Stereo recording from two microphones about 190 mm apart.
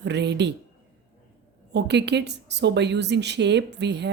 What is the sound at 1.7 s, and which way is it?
A woman's voice, 60° right (ahead or behind).